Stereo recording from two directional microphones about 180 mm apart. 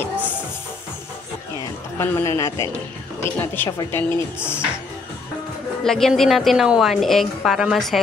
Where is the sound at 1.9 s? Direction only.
15° left (ahead or behind).